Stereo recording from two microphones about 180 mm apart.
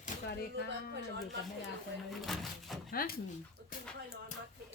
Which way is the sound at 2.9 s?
55° left (ahead or behind).